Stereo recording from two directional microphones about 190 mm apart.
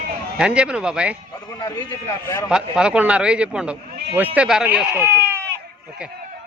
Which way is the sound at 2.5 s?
5° right (ahead or behind).